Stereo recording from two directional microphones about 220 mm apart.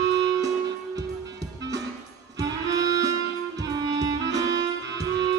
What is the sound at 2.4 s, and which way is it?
Music, 15° right (ahead or behind).